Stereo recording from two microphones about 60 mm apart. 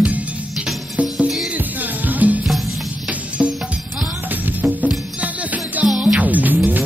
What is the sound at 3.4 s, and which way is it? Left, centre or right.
Music, centre.